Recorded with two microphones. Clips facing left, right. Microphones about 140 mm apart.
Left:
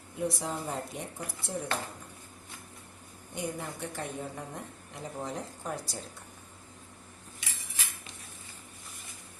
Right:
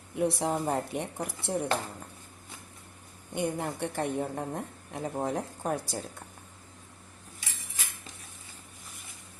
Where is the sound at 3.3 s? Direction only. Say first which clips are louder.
Right 5 dB; 60° right (ahead or behind).